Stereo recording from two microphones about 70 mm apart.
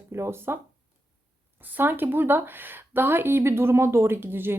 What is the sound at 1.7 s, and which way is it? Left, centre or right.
Speech, right.